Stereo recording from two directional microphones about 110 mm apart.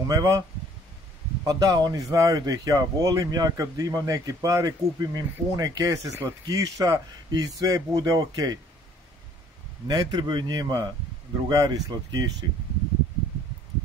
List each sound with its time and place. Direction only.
0.0 s speech: 30° right (ahead or behind)
1.4 s speech: 35° right (ahead or behind)
9.8 s speech: 40° right (ahead or behind)